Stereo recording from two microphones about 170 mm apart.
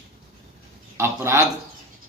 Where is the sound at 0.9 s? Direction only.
15° right (ahead or behind).